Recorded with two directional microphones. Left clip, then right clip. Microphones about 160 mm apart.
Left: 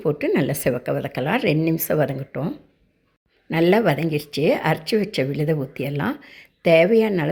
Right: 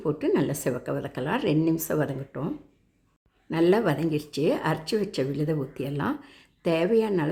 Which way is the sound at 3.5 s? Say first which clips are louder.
Left 5 dB; 10° left (ahead or behind).